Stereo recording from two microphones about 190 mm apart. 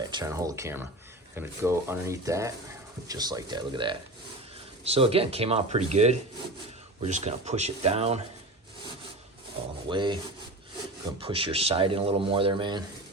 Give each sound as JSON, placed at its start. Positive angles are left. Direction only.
{"t": 0.1, "sound": "speech", "side_deg": -20}
{"t": 9.9, "sound": "speech", "side_deg": -25}
{"t": 11.2, "sound": "speech", "side_deg": -30}